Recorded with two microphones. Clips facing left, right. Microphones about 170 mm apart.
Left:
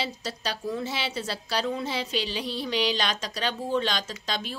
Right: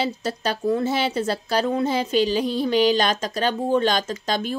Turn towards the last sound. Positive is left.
turn(degrees=-50)  # may be behind; listen again after turning